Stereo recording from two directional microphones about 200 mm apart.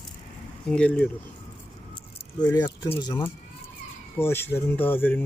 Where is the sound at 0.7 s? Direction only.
5° left (ahead or behind).